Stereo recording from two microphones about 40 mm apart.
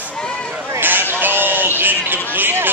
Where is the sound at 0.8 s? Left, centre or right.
Right.